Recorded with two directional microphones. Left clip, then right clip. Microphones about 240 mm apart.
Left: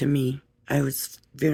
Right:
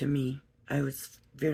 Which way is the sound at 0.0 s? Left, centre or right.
Left.